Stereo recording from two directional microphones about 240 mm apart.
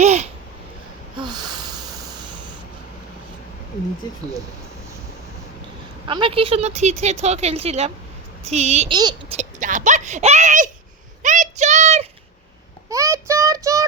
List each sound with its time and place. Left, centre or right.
0.0 s babbling: right
1.1 s snort: centre
6.1 s speech: right
9.4 s speech: right
11.2 s child singing: right
12.9 s child singing: centre